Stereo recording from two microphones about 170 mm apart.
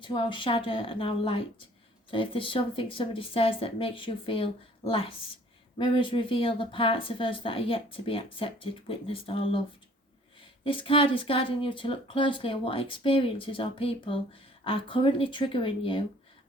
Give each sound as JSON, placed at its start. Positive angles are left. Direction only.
{"t": 0.0, "sound": "speech", "side_deg": 30}
{"t": 10.6, "sound": "speech", "side_deg": 30}